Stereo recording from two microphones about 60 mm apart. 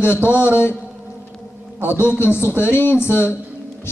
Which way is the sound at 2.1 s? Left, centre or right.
Left.